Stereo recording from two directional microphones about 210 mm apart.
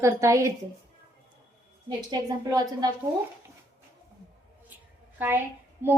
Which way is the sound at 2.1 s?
20° right (ahead or behind).